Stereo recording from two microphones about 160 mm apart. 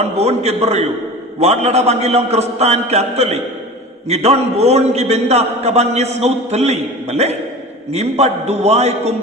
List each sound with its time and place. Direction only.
0.0 s a man's voice: 40° right (ahead or behind)